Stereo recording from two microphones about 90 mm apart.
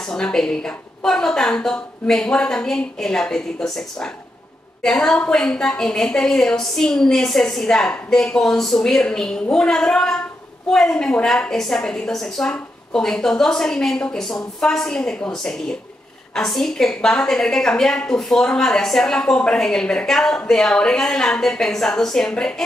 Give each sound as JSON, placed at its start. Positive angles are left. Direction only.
{"t": 0.0, "sound": "a woman's voice", "side_deg": 5}
{"t": 16.3, "sound": "a woman's voice", "side_deg": 5}